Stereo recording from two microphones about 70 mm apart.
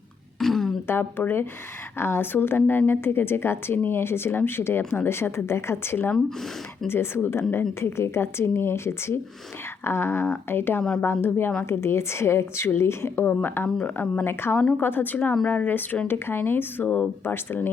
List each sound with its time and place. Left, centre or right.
0.3 s a sound: centre
0.9 s a woman's voice: left
14.3 s a woman's voice: left